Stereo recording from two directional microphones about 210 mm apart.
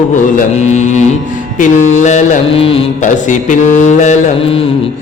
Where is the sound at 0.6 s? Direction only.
35° left (ahead or behind).